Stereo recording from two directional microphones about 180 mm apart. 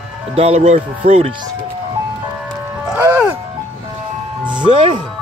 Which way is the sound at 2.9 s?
5° right (ahead or behind).